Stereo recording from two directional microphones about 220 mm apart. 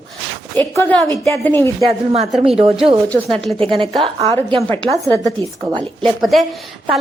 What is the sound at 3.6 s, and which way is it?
Speech, 25° right (ahead or behind).